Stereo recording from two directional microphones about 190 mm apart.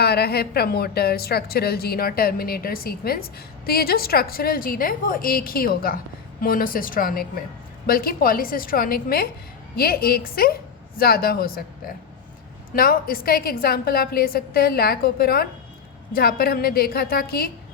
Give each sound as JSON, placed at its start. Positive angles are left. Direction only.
{"t": 0.0, "sound": "a woman's voice", "side_deg": 55}
{"t": 12.7, "sound": "a woman's voice", "side_deg": 50}